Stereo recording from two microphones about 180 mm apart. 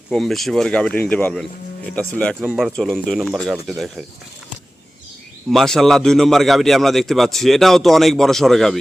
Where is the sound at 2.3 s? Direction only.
5° right (ahead or behind).